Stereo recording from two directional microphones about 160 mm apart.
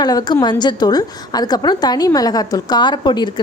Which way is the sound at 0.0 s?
25° left (ahead or behind).